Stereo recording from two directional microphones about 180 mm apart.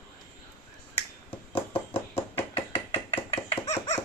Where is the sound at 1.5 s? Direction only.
30° left (ahead or behind).